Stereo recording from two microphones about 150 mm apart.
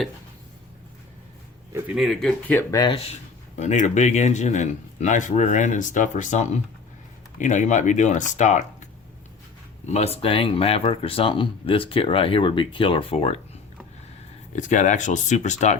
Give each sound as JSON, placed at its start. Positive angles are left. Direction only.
{"t": 2.0, "sound": "speech", "side_deg": 0}
{"t": 2.8, "sound": "speech", "side_deg": 40}
{"t": 9.8, "sound": "speech", "side_deg": 45}
{"t": 14.5, "sound": "speech", "side_deg": 55}